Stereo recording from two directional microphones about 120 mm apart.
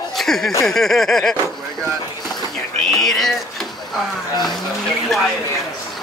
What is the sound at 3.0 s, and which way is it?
Speech, centre (ahead or behind).